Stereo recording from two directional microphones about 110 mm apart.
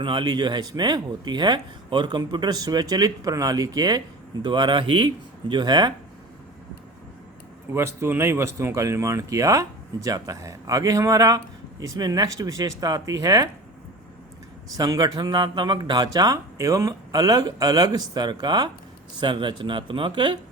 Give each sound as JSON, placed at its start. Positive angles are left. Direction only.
{"t": 0.0, "sound": "speech", "side_deg": -45}
{"t": 7.7, "sound": "speech", "side_deg": -25}
{"t": 14.8, "sound": "speech", "side_deg": -35}